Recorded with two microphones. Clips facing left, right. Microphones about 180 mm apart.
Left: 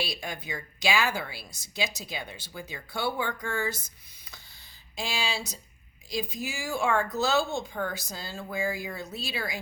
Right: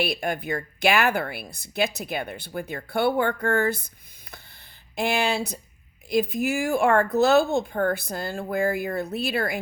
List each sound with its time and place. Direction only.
0.0 s speech: 55° right (ahead or behind)
4.9 s speech: 60° right (ahead or behind)